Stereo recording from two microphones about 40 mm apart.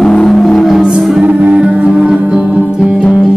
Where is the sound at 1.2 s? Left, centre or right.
Right.